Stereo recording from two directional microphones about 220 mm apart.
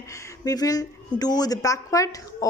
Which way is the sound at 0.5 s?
15° left (ahead or behind).